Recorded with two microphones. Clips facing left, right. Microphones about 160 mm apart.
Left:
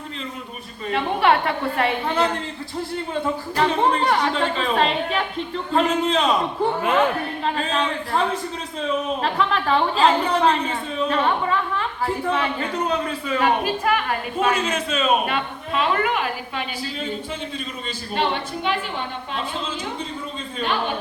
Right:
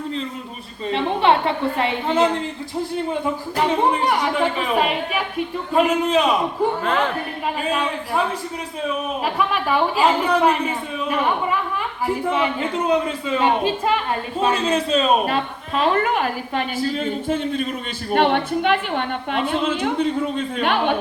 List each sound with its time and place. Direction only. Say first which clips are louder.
0.9 s a woman's voice: right 1 dB; 25° right (ahead or behind)
3.6 s a woman's voice: right 1 dB; 15° right (ahead or behind)
7.6 s a woman's voice: right 1 dB; 10° right (ahead or behind)
9.2 s a woman's voice: right 3 dB; 10° right (ahead or behind); by 20.9 s 60° right (ahead or behind)